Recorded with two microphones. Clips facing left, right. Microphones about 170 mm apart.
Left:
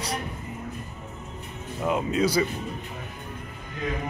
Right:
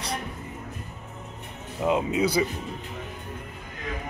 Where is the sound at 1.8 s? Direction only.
20° right (ahead or behind).